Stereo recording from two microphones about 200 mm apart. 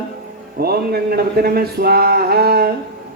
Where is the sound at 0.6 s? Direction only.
50° right (ahead or behind).